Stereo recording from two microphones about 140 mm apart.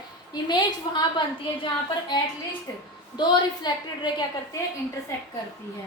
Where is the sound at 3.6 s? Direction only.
30° left (ahead or behind).